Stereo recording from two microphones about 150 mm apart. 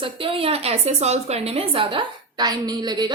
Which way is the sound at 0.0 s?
35° right (ahead or behind).